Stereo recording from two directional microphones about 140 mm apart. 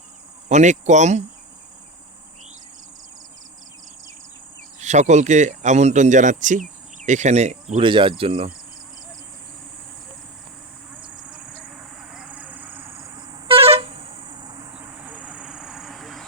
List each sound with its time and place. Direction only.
0.4 s speech: 55° right (ahead or behind)
4.8 s speech: 55° right (ahead or behind)
7.8 s speech: 35° right (ahead or behind)
10.9 s a sound: 5° right (ahead or behind)
11.6 s vehicle: 5° right (ahead or behind); by 13.4 s 25° right (ahead or behind)
13.5 s vehicle horn: 45° right (ahead or behind); by 14.7 s 30° right (ahead or behind)
14.7 s vehicle: 10° right (ahead or behind)